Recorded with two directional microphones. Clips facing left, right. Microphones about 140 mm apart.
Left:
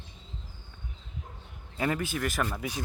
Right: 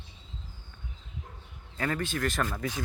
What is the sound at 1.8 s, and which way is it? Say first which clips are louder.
Speech: left 1 dB; 10° left (ahead or behind).